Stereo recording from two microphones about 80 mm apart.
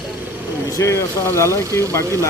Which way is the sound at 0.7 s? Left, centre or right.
Left.